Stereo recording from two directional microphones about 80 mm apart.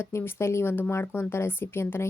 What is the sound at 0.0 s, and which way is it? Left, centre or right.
A woman's voice, left.